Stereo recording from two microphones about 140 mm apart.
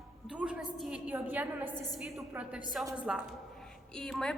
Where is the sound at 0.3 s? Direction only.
10° right (ahead or behind).